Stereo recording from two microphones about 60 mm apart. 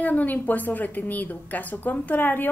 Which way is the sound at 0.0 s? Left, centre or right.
Left.